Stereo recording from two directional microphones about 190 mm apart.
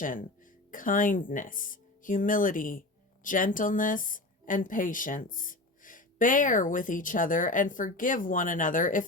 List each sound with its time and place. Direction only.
0.0 s a woman's voice: 45° left (ahead or behind)